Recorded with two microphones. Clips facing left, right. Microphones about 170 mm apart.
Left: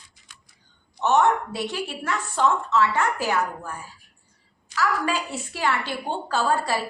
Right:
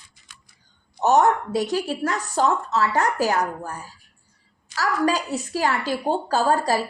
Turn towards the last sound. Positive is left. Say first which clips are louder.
# right 3 dB
turn(degrees=-40)  # may be behind; listen again after turning